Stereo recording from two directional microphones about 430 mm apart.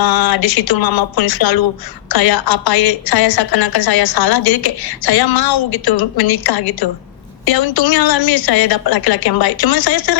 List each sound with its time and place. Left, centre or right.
0.0 s a woman's voice: left